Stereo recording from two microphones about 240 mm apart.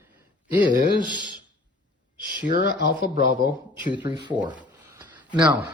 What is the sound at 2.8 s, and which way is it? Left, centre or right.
Speech, left.